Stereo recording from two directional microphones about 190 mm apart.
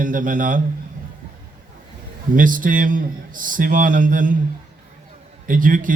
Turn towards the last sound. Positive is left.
turn(degrees=-45)  # may be behind; listen again after turning